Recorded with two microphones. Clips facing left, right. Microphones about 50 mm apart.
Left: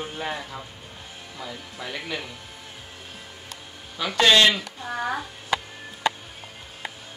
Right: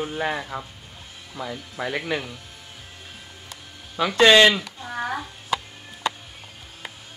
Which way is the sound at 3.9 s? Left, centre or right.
Right.